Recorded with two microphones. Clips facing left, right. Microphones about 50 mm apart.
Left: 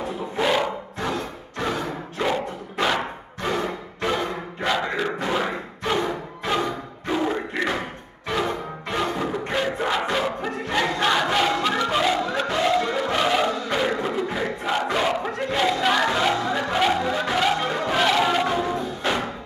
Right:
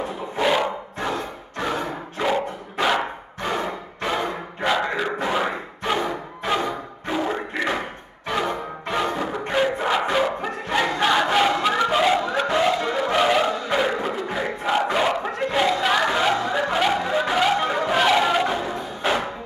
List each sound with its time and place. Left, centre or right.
0.4 s music: centre
2.2 s dog: centre
3.4 s a sound: centre
4.6 s thump: centre
8.3 s music: centre
9.5 s battle cry: centre
12.8 s choir: centre
13.7 s a sound: centre
14.8 s battle cry: centre
15.8 s music: centre